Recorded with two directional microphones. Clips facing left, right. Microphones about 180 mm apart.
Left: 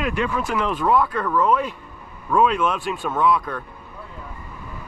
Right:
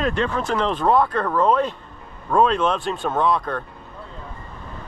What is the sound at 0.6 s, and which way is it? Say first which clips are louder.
Speech: right 2 dB; 30° right (ahead or behind).